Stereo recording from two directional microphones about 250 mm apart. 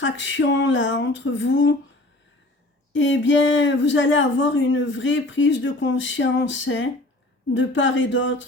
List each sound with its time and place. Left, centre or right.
0.0 s speech: left
2.9 s speech: left